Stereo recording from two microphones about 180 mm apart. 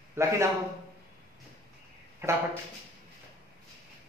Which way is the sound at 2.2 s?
15° right (ahead or behind).